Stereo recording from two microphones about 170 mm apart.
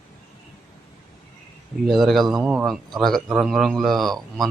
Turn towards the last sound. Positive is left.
turn(degrees=0)  # may be behind; listen again after turning